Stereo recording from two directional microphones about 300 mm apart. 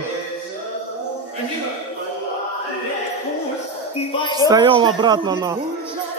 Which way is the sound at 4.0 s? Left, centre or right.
Centre.